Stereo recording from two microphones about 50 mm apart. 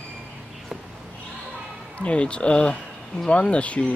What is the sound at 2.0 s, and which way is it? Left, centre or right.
Speech, left.